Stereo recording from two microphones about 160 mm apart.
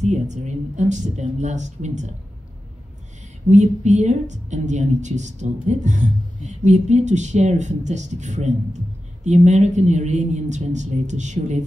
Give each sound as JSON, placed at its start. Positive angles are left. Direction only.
{"t": 0.0, "sound": "a woman's voice", "side_deg": -45}
{"t": 3.4, "sound": "a woman's voice", "side_deg": -50}